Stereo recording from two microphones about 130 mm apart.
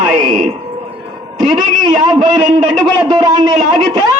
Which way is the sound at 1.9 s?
35° right (ahead or behind).